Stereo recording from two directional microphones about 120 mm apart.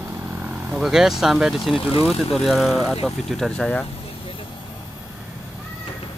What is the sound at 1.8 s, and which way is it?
Speech, 50° left (ahead or behind).